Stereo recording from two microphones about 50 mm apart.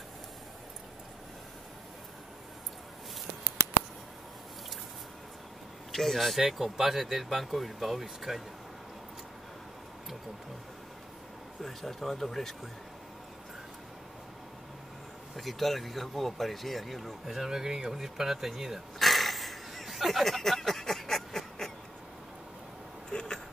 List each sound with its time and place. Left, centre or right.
5.9 s speech: centre
11.6 s speech: centre
15.3 s speech: centre
23.0 s a sound: centre